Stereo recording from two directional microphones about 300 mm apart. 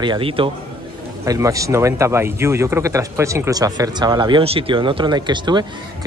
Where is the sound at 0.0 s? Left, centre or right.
Centre.